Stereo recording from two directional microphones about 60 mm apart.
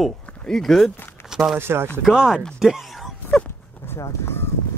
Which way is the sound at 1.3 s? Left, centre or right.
Centre.